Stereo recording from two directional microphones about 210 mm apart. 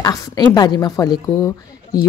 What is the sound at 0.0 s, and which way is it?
A woman's voice, 15° left (ahead or behind).